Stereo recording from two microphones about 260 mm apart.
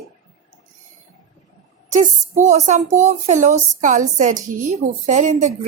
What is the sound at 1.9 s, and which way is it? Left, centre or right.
Speech, right.